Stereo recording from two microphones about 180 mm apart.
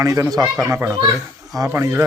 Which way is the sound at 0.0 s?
15° right (ahead or behind).